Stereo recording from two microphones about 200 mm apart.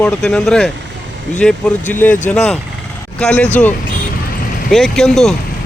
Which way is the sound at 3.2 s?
5° left (ahead or behind).